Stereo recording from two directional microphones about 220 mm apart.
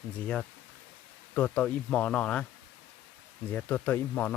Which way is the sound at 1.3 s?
5° left (ahead or behind).